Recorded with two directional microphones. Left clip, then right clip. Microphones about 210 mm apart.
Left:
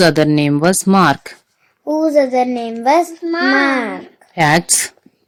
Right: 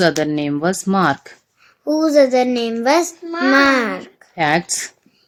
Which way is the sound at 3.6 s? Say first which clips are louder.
Right 1 dB; 10° right (ahead or behind).